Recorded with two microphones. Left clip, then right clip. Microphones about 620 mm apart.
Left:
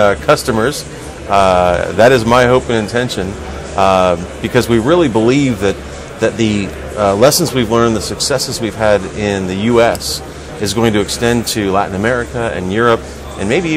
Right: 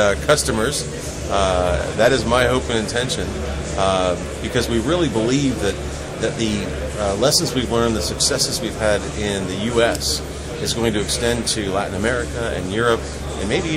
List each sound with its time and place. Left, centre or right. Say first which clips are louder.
0.0 s a man's voice: left 6 dB; left